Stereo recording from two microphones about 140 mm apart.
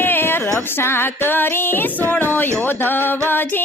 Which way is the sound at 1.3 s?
15° left (ahead or behind).